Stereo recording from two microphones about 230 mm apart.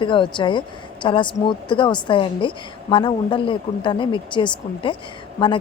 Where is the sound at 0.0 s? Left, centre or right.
Left.